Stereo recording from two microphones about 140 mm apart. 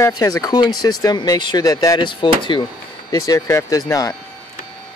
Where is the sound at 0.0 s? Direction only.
25° left (ahead or behind).